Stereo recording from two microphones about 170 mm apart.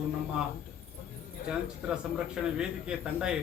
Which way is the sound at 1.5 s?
5° right (ahead or behind).